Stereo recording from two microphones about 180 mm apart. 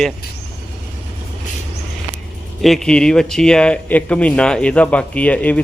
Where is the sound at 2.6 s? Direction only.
Centre (ahead or behind).